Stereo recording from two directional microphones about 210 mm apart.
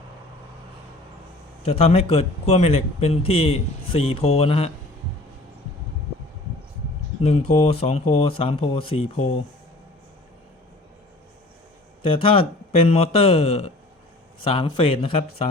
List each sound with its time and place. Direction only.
1.6 s a man's voice: 30° left (ahead or behind)
7.2 s a man's voice: 30° left (ahead or behind)
12.0 s a man's voice: 25° left (ahead or behind)